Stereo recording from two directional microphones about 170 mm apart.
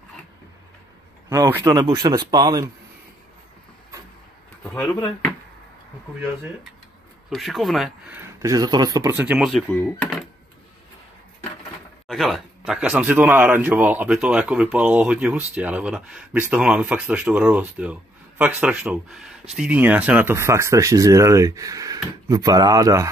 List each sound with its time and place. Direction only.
1.3 s a man's voice: 15° right (ahead or behind)
4.6 s speech: 15° left (ahead or behind)
7.2 s speech: centre (ahead or behind)
8.2 s a man's voice: 20° right (ahead or behind)
9.1 s speech: 10° right (ahead or behind)
12.1 s a man's voice: centre (ahead or behind); by 23.0 s 20° right (ahead or behind)